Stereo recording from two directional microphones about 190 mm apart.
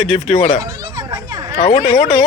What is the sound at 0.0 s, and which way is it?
Speech, 35° left (ahead or behind).